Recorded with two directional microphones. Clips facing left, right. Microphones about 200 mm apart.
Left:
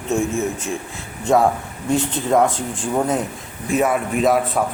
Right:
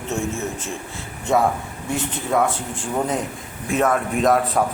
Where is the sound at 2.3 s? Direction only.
15° left (ahead or behind).